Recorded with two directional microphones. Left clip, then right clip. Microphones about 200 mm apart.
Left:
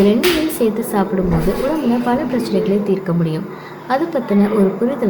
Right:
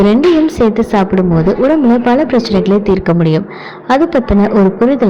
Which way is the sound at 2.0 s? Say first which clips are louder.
Right 7 dB; 40° right (ahead or behind).